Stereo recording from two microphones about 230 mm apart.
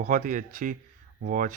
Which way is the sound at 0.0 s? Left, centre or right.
Right.